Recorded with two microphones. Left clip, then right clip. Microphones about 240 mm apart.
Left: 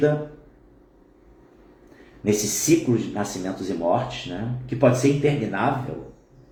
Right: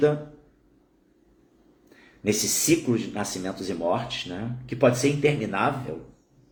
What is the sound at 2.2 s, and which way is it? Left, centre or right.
Speech, centre.